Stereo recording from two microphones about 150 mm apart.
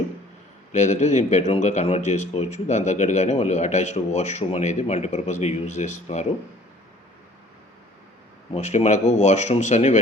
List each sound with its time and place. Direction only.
0.7 s speech: 50° left (ahead or behind)
8.5 s speech: 50° left (ahead or behind)